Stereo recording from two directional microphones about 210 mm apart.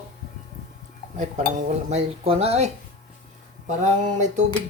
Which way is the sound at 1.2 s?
35° right (ahead or behind).